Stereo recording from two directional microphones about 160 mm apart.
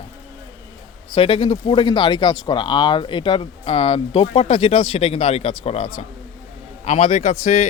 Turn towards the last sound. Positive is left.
turn(degrees=40)  # may be behind; listen again after turning